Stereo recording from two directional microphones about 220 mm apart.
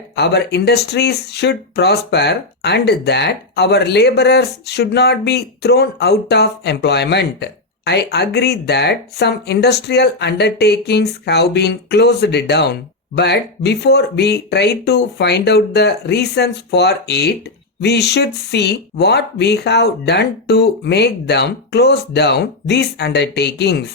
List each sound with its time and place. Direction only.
0.2 s speech: 50° left (ahead or behind)